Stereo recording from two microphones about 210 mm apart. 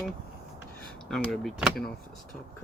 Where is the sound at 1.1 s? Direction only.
Centre (ahead or behind).